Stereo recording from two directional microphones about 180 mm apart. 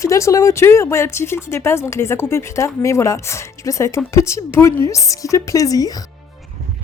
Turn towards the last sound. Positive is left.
turn(degrees=20)  # may be behind; listen again after turning